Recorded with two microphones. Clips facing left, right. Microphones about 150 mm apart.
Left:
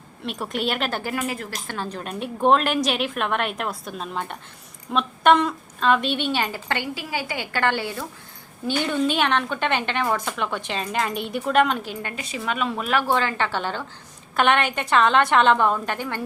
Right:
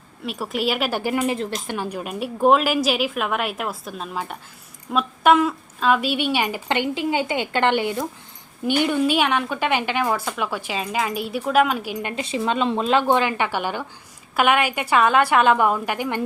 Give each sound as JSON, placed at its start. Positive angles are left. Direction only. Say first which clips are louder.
{"t": 0.3, "sound": "a woman's voice", "louder": "right 2 dB", "side_deg": -5}
{"t": 12.0, "sound": "a woman's voice", "louder": "right 9 dB", "side_deg": -25}